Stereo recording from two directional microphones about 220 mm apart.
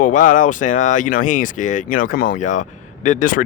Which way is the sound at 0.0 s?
35° left (ahead or behind).